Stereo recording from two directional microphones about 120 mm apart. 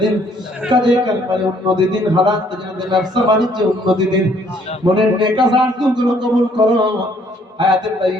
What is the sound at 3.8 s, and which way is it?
A man's voice, 35° right (ahead or behind).